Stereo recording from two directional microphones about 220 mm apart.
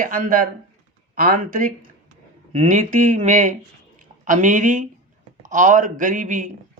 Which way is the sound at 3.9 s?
35° right (ahead or behind).